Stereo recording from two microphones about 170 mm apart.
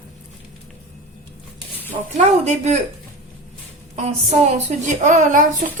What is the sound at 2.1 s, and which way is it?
Speech, 40° right (ahead or behind).